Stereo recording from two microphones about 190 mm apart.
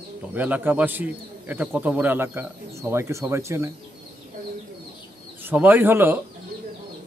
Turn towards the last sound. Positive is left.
turn(degrees=-10)  # may be behind; listen again after turning